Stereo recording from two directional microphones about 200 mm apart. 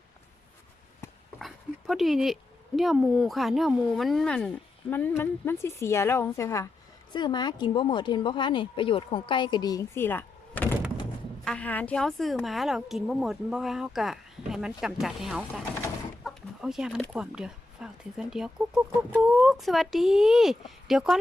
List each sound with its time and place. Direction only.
1.4 s speech: centre (ahead or behind)